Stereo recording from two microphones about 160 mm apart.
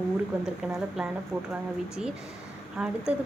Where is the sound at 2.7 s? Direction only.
5° right (ahead or behind).